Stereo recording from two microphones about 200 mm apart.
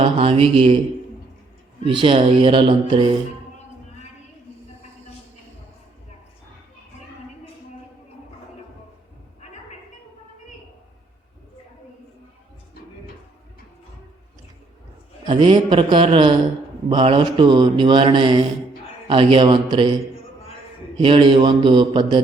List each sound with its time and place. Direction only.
0.0 s speech: 30° right (ahead or behind)
1.8 s speech: 25° right (ahead or behind)
15.3 s speech: 25° right (ahead or behind)
21.0 s speech: 25° right (ahead or behind)